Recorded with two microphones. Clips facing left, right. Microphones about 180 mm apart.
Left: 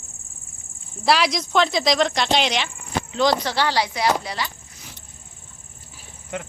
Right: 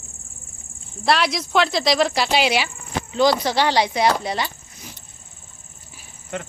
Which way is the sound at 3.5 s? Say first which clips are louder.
Right 3 dB; 20° right (ahead or behind).